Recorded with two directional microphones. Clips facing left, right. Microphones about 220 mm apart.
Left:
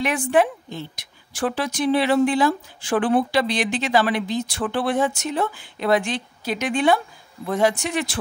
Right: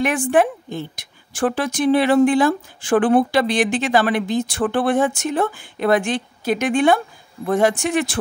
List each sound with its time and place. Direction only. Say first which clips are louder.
0.0 s a woman's voice: right 2 dB; 50° right (ahead or behind)